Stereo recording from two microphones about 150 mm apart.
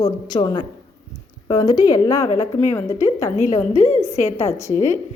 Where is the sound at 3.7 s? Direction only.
45° left (ahead or behind).